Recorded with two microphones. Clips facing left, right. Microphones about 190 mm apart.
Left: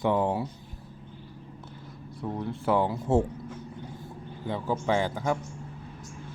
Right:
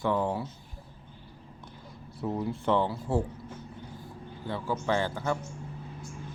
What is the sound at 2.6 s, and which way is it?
Speech, 10° left (ahead or behind).